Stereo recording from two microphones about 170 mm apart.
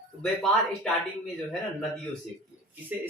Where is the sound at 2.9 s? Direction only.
5° right (ahead or behind).